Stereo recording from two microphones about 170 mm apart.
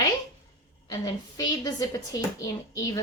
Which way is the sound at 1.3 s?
20° left (ahead or behind).